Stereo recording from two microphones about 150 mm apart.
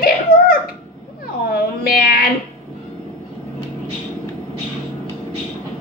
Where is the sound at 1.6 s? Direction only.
90° left.